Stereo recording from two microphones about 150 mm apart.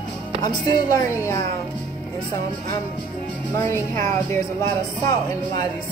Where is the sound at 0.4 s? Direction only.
30° left (ahead or behind).